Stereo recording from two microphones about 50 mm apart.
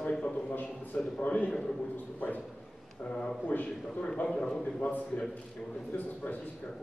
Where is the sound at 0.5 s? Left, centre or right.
Left.